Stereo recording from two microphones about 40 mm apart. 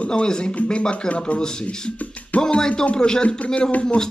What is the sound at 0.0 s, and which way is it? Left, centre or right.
Speech, left.